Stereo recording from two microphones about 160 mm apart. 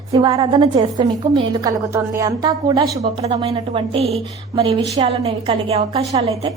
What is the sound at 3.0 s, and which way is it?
A woman's voice, 35° right (ahead or behind).